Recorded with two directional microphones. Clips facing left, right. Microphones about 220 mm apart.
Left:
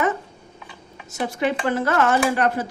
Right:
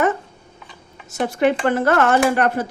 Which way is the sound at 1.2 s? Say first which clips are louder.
Right 5 dB; 60° right (ahead or behind).